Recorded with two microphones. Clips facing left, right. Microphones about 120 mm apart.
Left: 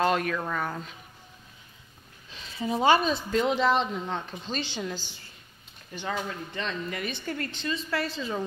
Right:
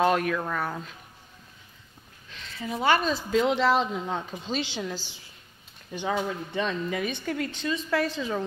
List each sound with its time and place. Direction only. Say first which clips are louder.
0.0 s speech: right 2 dB; 5° right (ahead or behind)
2.3 s a sound: left 4 dB; 20° left (ahead or behind)
3.3 s speech: right 3 dB; centre (ahead or behind)